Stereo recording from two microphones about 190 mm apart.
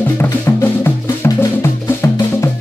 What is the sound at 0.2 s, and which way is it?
Music, 10° left (ahead or behind).